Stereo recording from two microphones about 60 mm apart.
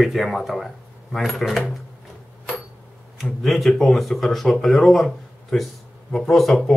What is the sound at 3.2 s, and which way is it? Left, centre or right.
Speech, centre.